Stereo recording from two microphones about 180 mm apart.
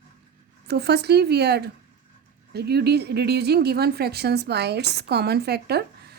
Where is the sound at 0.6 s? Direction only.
65° right (ahead or behind).